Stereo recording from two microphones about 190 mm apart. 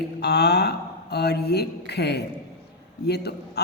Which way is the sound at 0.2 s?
60° left (ahead or behind).